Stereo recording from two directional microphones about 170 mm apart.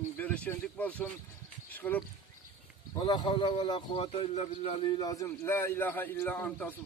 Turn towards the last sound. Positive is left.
turn(degrees=10)  # may be behind; listen again after turning